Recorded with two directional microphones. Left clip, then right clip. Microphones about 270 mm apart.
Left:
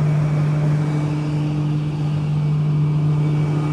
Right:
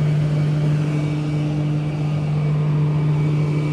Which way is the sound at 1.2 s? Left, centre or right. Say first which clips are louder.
Even; left.